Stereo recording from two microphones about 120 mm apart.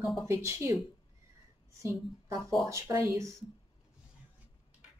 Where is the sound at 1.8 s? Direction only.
25° right (ahead or behind).